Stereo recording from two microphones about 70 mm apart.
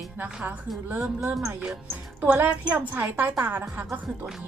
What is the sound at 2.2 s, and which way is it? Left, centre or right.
A woman's voice, right.